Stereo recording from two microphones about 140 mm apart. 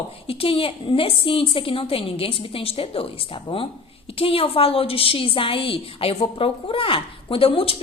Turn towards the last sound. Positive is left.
turn(degrees=40)  # may be behind; listen again after turning